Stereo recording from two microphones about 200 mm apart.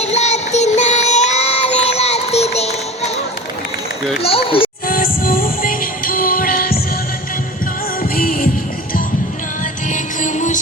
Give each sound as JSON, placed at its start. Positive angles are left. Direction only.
{"t": 0.0, "sound": "child singing", "side_deg": 35}
{"t": 4.4, "sound": "speech", "side_deg": 25}
{"t": 4.9, "sound": "music", "side_deg": 45}
{"t": 8.1, "sound": "music", "side_deg": 45}
{"t": 9.9, "sound": "music", "side_deg": 40}